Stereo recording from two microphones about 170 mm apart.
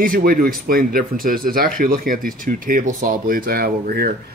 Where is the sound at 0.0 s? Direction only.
60° right (ahead or behind).